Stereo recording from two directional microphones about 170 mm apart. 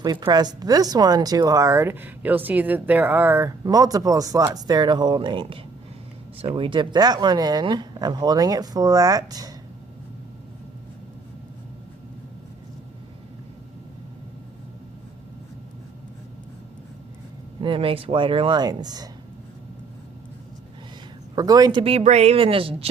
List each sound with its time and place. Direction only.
0.0 s speech: 25° right (ahead or behind)
17.6 s speech: 30° right (ahead or behind)
21.3 s speech: 25° right (ahead or behind)